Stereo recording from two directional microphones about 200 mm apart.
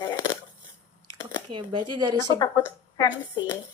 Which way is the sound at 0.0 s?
20° left (ahead or behind).